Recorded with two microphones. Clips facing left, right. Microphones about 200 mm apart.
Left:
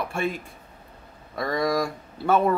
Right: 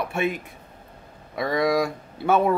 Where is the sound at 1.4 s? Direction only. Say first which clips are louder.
Right 2 dB; centre (ahead or behind).